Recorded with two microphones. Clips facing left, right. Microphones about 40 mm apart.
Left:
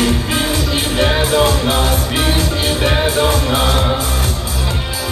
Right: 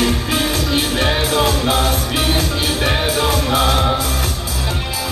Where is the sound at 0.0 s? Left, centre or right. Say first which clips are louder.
Left 1 dB; left.